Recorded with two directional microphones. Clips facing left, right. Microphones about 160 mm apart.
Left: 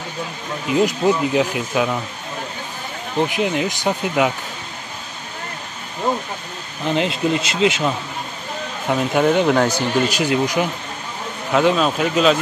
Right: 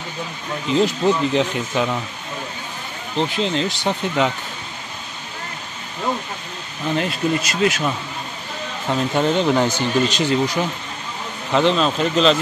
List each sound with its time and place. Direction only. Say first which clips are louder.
0.7 s speech: left 1 dB; 10° left (ahead or behind)
3.2 s speech: left 1 dB; 15° left (ahead or behind)
6.9 s speech: left 2 dB; 20° left (ahead or behind)
8.8 s speech: left 2 dB; 10° left (ahead or behind)